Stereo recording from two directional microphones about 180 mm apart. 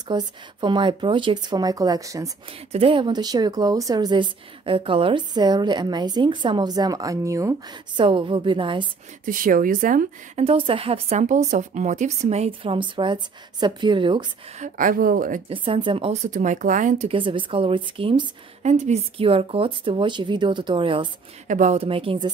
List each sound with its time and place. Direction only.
0.1 s a woman's voice: 25° right (ahead or behind)
2.7 s a woman's voice: 30° right (ahead or behind)
9.2 s speech: 50° right (ahead or behind)
10.4 s speech: 30° right (ahead or behind)
14.6 s speech: 50° right (ahead or behind)
15.5 s speech: 30° right (ahead or behind); by 17.1 s 45° right (ahead or behind)
17.1 s a woman's voice: 30° right (ahead or behind)
21.5 s speech: 45° right (ahead or behind)
21.8 s a woman's voice: 30° right (ahead or behind)